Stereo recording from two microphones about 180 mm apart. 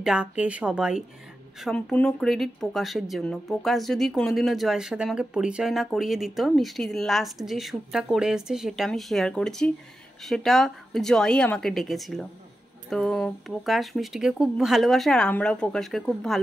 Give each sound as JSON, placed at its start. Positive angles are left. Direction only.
{"t": 0.0, "sound": "speech", "side_deg": -5}